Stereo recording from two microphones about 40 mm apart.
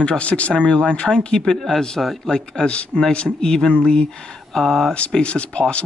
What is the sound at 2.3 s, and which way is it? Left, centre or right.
Speech, centre.